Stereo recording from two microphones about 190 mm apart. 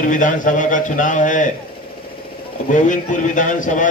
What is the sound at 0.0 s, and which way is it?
A man's voice, 45° left (ahead or behind).